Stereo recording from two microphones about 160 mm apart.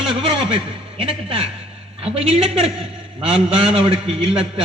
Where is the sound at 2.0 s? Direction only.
35° right (ahead or behind).